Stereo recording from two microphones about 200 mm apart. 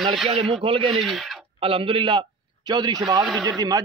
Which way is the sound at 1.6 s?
25° right (ahead or behind).